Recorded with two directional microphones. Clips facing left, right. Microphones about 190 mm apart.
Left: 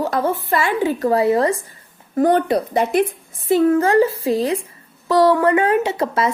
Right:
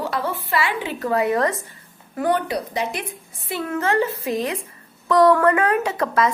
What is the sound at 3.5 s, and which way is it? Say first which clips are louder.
A woman's voice: left 9 dB; 35° left (ahead or behind).